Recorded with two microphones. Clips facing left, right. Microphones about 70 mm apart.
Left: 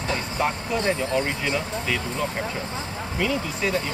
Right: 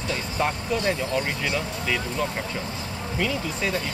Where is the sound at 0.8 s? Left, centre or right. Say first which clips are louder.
Left 4 dB; left.